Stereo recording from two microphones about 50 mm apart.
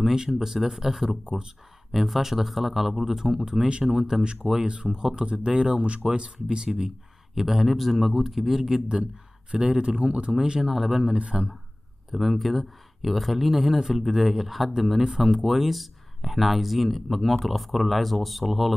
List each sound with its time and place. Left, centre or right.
0.0 s speech: centre
3.5 s speech: centre
7.3 s speech: centre
8.8 s speech: right
10.4 s speech: centre
11.1 s speech: right
12.1 s speech: centre